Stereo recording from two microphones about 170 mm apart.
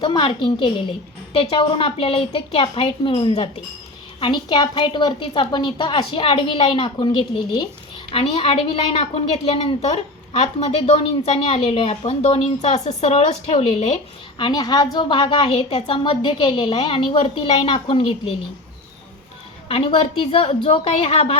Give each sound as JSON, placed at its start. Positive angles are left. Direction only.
{"t": 0.0, "sound": "a woman's voice", "side_deg": 30}
{"t": 14.3, "sound": "a woman's voice", "side_deg": 25}
{"t": 19.6, "sound": "a woman's voice", "side_deg": 35}